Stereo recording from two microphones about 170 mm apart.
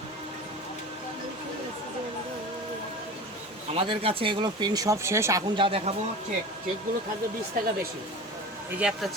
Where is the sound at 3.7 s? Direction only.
30° right (ahead or behind).